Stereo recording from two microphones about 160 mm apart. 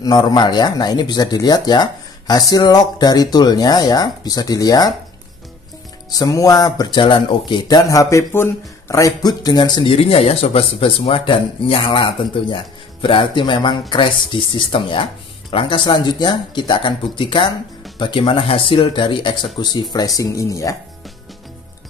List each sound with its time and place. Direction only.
0.0 s speech: 25° left (ahead or behind)
6.1 s speech: 20° left (ahead or behind)